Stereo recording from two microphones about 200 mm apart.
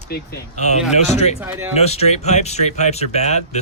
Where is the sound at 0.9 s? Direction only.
35° left (ahead or behind).